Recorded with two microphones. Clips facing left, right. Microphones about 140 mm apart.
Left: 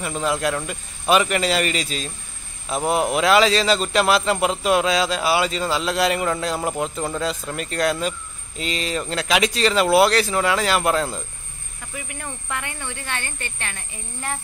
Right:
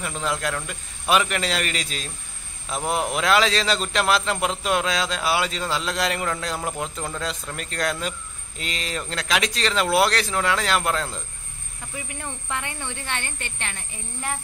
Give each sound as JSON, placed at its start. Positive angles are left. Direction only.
{"t": 0.0, "sound": "a man's voice", "side_deg": 5}
{"t": 12.1, "sound": "speech", "side_deg": -20}